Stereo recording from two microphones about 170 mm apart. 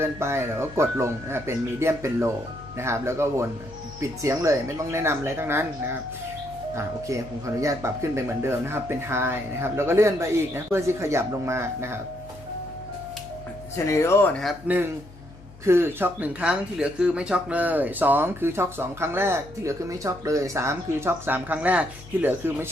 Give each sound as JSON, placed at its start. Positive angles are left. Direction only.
{"t": 0.0, "sound": "speech", "side_deg": -15}
{"t": 13.7, "sound": "speech", "side_deg": 15}
{"t": 15.6, "sound": "speech", "side_deg": -15}